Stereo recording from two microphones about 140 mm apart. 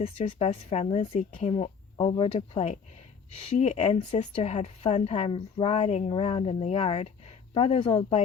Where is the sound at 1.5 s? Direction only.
35° left (ahead or behind).